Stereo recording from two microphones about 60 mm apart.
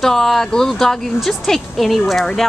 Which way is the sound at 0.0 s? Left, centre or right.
Centre.